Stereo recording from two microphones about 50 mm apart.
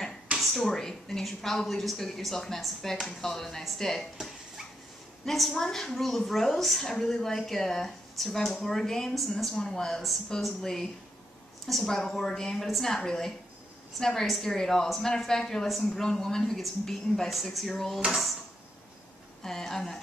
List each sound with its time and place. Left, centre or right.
0.4 s a sound: centre
0.7 s a woman's voice: centre
5.2 s a woman's voice: centre
19.4 s a woman's voice: centre